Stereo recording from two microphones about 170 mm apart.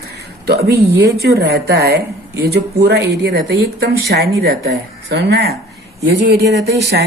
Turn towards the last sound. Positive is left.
turn(degrees=-70)  # may be behind; listen again after turning